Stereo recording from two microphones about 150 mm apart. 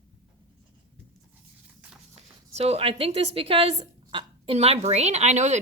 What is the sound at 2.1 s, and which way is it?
Speech, 45° right (ahead or behind).